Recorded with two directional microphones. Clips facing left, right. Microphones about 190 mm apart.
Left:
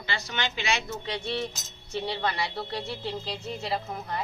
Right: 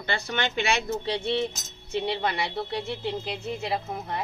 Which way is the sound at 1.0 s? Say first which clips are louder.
Right 5 dB; 25° right (ahead or behind).